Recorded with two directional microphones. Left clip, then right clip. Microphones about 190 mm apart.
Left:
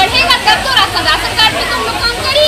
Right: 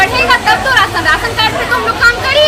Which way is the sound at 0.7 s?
5° right (ahead or behind).